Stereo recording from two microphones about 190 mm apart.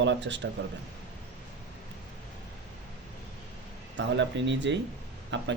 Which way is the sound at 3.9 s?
70° right (ahead or behind).